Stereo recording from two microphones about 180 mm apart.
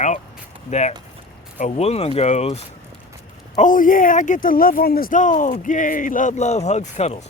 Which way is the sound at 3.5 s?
45° left (ahead or behind).